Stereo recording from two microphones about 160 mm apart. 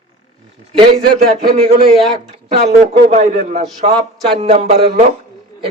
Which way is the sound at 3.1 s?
45° right (ahead or behind).